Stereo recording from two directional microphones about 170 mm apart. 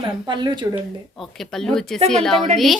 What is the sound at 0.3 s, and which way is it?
Speech, 25° right (ahead or behind).